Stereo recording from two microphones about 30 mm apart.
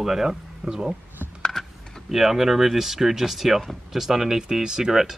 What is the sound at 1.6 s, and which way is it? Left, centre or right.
Power windows, centre.